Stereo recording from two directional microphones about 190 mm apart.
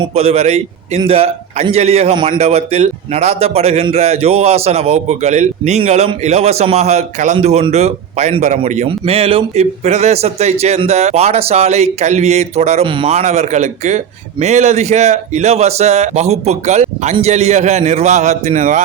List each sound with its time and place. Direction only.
0.0 s speech: 30° right (ahead or behind)